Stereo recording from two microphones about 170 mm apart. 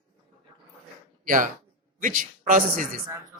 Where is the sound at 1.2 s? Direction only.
50° right (ahead or behind).